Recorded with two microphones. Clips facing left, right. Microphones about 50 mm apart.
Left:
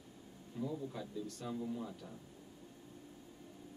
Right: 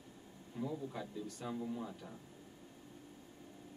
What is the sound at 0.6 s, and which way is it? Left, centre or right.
Speech, right.